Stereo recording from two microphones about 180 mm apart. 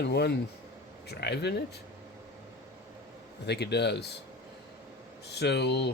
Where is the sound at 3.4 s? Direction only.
65° left (ahead or behind).